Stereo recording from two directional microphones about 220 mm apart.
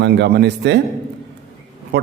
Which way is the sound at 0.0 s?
50° right (ahead or behind).